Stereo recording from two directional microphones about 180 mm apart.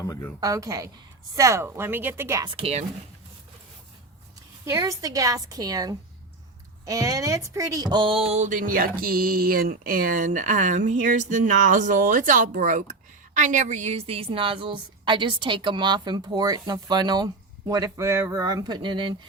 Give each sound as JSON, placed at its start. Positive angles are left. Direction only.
{"t": 0.0, "sound": "speech", "side_deg": 15}
{"t": 0.3, "sound": "speech", "side_deg": -20}
{"t": 2.4, "sound": "speech", "side_deg": -30}
{"t": 4.6, "sound": "speech", "side_deg": -15}